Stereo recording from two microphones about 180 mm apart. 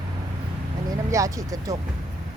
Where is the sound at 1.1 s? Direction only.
20° right (ahead or behind).